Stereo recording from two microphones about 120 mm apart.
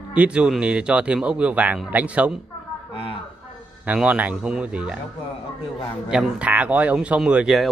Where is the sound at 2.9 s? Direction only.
50° left (ahead or behind).